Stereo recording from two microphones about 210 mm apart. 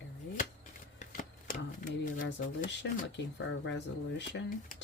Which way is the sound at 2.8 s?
55° left (ahead or behind).